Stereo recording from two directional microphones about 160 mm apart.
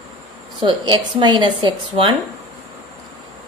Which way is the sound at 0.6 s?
30° right (ahead or behind).